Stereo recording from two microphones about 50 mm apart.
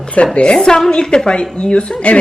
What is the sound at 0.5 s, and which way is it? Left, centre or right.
A woman's voice, centre.